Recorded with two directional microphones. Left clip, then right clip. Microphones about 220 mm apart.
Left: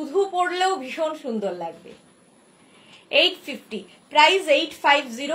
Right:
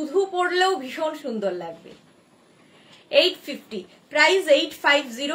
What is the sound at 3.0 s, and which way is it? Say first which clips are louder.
A woman's voice: even; 20° right (ahead or behind).